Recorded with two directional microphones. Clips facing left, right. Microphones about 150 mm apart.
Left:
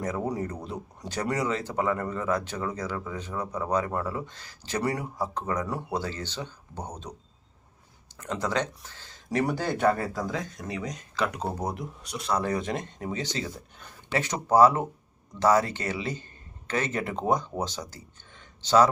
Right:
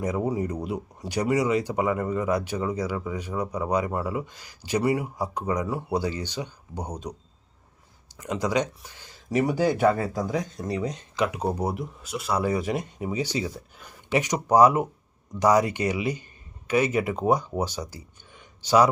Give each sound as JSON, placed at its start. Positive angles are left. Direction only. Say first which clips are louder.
{"t": 0.0, "sound": "speech", "louder": "right 3 dB", "side_deg": -10}
{"t": 8.2, "sound": "speech", "louder": "right 3 dB", "side_deg": -10}
{"t": 10.6, "sound": "speech", "louder": "right 5 dB", "side_deg": -30}
{"t": 11.3, "sound": "speech", "louder": "right 4 dB", "side_deg": -10}